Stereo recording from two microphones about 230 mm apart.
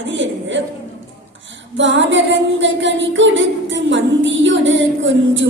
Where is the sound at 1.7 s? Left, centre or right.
Right.